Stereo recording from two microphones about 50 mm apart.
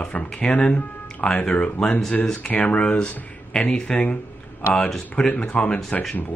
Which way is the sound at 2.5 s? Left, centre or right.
Left.